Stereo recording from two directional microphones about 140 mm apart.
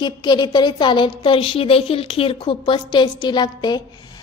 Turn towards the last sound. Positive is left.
turn(degrees=30)  # may be behind; listen again after turning